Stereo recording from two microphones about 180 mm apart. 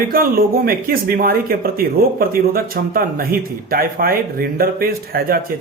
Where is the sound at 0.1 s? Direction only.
55° right (ahead or behind).